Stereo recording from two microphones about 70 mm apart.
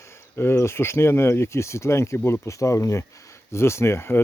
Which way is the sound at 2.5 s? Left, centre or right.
Left.